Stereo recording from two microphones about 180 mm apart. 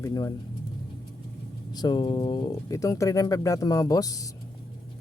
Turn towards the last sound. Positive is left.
turn(degrees=20)  # may be behind; listen again after turning